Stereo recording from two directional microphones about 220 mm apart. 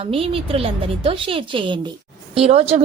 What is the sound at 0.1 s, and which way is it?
A woman's voice, 25° right (ahead or behind).